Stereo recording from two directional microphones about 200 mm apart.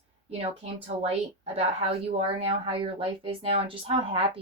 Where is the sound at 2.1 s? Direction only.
30° right (ahead or behind).